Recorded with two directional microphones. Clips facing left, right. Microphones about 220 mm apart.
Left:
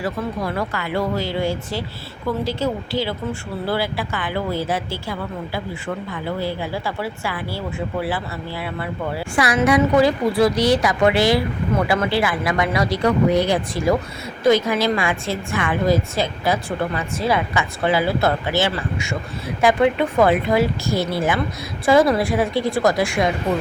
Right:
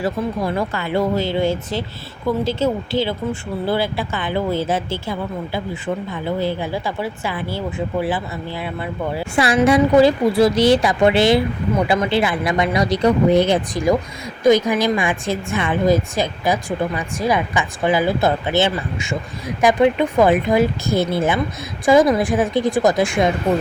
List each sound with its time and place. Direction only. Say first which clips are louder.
0.0 s speech: right 3 dB; 25° right (ahead or behind)
6.2 s speech: right 3 dB; 20° right (ahead or behind)
9.1 s a woman's voice: right 3 dB; 25° right (ahead or behind)